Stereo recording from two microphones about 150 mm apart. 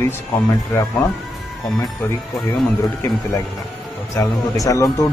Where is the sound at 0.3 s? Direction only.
Centre (ahead or behind).